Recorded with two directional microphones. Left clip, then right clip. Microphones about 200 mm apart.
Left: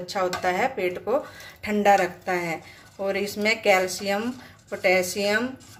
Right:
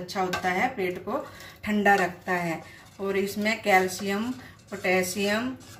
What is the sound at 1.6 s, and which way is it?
A woman's voice, 40° left (ahead or behind).